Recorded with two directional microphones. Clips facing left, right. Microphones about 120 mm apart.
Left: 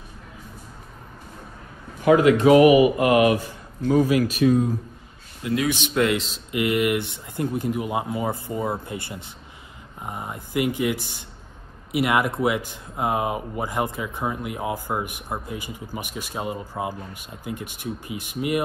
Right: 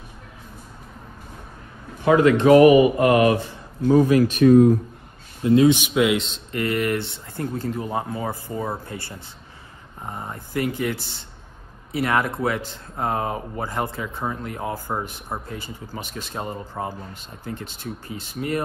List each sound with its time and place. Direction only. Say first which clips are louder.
2.4 s speech: right 3 dB; 40° right (ahead or behind)
4.4 s speech: right 9 dB; 50° right (ahead or behind)
5.4 s speech: right 8 dB; 25° right (ahead or behind)
5.8 s a man's voice: right 2 dB; 5° right (ahead or behind)
6.6 s speech: left 1 dB; 15° left (ahead or behind)